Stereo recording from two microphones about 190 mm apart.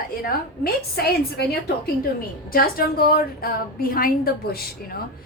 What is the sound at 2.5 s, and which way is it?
A woman's voice, 50° left (ahead or behind).